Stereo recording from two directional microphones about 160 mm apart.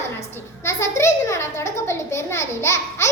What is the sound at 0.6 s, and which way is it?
A child's voice, 15° left (ahead or behind).